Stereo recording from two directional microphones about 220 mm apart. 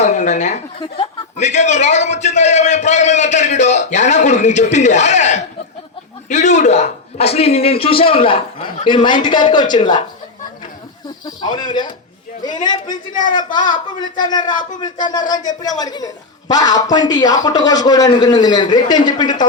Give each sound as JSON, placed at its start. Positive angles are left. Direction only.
{"t": 0.0, "sound": "a man's voice", "side_deg": 30}
{"t": 11.3, "sound": "a man's voice", "side_deg": 20}